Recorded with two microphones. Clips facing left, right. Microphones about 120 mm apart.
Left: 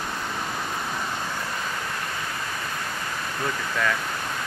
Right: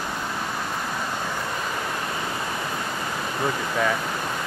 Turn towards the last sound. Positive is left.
turn(degrees=-15)  # may be behind; listen again after turning